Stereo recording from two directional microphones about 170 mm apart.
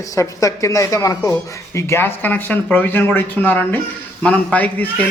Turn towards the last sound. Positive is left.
turn(degrees=10)  # may be behind; listen again after turning